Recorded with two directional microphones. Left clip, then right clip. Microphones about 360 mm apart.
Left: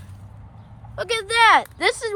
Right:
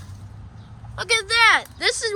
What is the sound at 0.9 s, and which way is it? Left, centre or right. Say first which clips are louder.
Speech: right 1 dB; centre.